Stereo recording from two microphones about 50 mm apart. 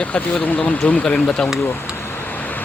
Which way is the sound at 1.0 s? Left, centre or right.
Centre.